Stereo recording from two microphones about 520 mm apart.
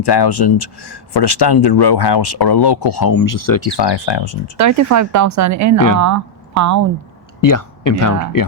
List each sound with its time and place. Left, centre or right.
0.0 s speech: left
4.5 s speech: right
7.4 s speech: left